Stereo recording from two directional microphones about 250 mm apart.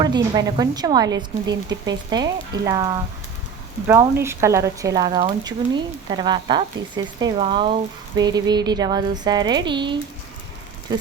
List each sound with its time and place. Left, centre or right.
0.0 s speech: centre
1.1 s speech: right
1.9 s speech: centre